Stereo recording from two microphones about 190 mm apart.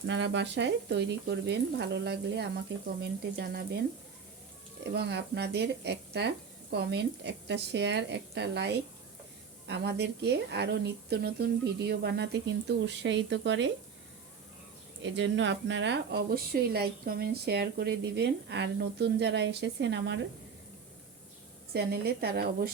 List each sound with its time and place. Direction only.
0.0 s speech: 70° right (ahead or behind)
4.8 s speech: 60° right (ahead or behind)
15.0 s speech: 70° right (ahead or behind)
21.7 s speech: 55° right (ahead or behind)